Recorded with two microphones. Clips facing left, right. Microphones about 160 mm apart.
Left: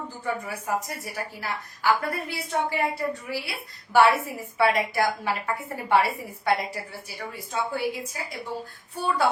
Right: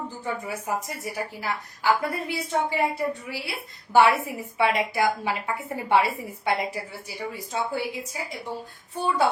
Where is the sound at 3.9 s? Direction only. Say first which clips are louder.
Even; 15° right (ahead or behind).